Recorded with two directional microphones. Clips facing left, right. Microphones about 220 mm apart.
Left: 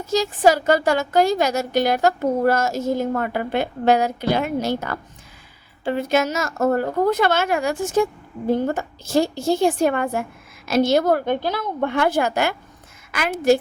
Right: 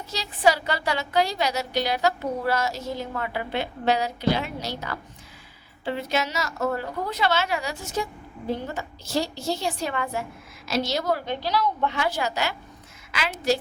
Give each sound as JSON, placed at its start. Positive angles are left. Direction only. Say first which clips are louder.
{"t": 0.0, "sound": "a woman's voice", "louder": "left 6 dB", "side_deg": 45}